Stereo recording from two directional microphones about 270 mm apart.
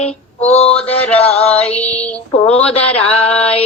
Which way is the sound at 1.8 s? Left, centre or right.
Centre.